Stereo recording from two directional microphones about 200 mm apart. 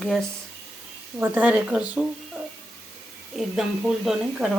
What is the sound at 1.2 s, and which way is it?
Speech, 5° right (ahead or behind).